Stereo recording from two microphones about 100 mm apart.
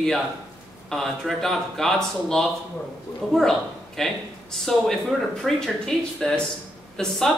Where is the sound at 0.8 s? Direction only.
Centre (ahead or behind).